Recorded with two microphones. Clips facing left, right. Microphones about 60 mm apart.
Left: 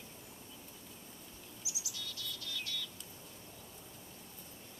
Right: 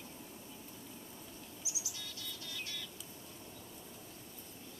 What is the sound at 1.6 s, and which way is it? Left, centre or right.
Bird, right.